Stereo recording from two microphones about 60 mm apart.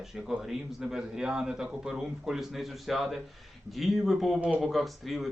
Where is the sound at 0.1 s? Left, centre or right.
Centre.